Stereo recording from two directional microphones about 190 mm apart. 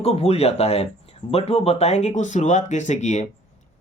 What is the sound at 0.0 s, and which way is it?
Speech, 30° left (ahead or behind).